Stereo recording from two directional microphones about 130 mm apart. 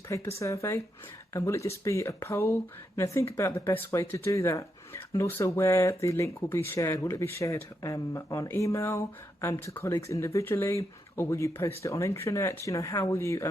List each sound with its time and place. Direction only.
0.1 s speech: 25° left (ahead or behind)